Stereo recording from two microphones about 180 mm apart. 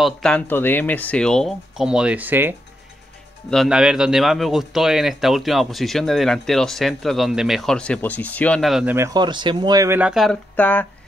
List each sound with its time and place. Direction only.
0.0 s a man's voice: 5° left (ahead or behind); by 2.5 s 10° right (ahead or behind)
3.4 s a man's voice: centre (ahead or behind)
8.9 s speech: 20° right (ahead or behind)
10.5 s speech: 10° left (ahead or behind)